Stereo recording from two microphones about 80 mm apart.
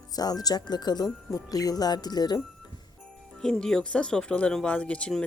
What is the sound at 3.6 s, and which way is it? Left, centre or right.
Speech, centre.